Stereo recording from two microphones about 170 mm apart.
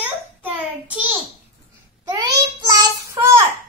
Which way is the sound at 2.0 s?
25° right (ahead or behind).